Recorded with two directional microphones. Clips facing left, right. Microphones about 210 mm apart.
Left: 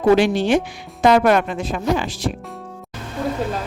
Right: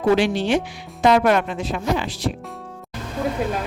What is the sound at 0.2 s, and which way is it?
Speech, 45° left (ahead or behind).